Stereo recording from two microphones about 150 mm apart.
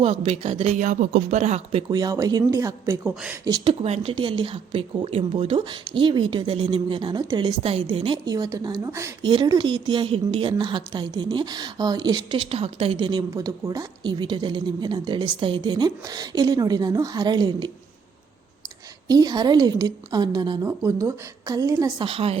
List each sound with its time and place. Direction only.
0.0 s speech: 40° right (ahead or behind)
1.9 s a woman's voice: 25° right (ahead or behind)
3.7 s a woman's voice: 45° right (ahead or behind); by 9.1 s 20° right (ahead or behind)
9.2 s a woman's voice: 30° right (ahead or behind)
19.0 s a woman's voice: 25° right (ahead or behind)
22.0 s a woman's voice: 40° right (ahead or behind)